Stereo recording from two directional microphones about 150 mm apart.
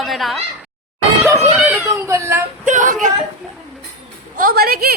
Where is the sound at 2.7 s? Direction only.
60° right (ahead or behind).